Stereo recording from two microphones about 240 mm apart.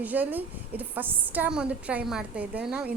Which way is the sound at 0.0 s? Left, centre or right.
Centre.